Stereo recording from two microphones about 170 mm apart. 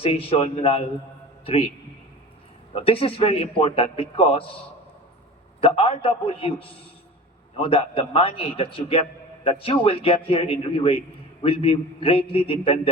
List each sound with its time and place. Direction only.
0.0 s a man's voice: 35° left (ahead or behind)
2.7 s a man's voice: 35° left (ahead or behind)
5.5 s a man's voice: 35° left (ahead or behind)